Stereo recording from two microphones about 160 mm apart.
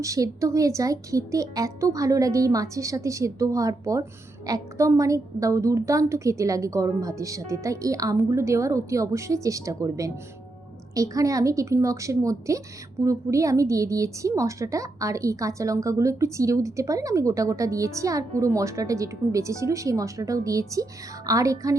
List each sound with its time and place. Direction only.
0.0 s a woman's voice: 20° right (ahead or behind)